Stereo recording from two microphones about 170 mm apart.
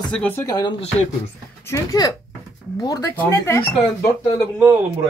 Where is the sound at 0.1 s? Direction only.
10° left (ahead or behind).